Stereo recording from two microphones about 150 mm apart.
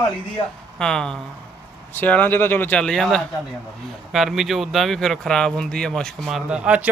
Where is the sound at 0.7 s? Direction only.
5° left (ahead or behind).